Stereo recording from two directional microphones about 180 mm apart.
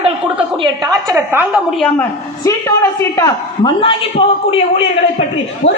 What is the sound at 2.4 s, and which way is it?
A man's voice, 15° left (ahead or behind).